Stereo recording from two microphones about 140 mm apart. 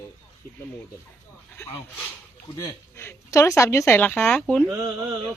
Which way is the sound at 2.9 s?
20° left (ahead or behind).